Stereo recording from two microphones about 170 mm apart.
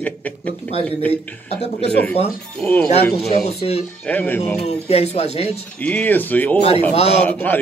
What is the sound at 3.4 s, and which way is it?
Speech, 40° left (ahead or behind).